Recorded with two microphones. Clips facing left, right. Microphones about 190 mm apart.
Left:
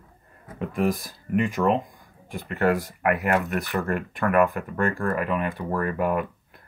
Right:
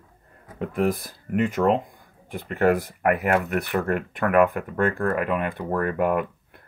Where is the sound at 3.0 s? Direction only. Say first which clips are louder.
Right 1 dB; 60° right (ahead or behind).